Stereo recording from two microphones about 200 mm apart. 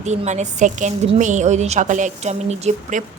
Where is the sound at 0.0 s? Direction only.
35° right (ahead or behind).